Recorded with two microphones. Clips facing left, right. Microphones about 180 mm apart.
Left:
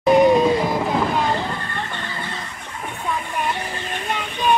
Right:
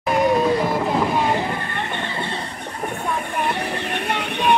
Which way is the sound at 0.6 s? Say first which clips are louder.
Even; centre (ahead or behind).